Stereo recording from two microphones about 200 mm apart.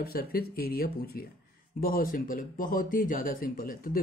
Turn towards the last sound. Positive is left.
turn(degrees=45)  # may be behind; listen again after turning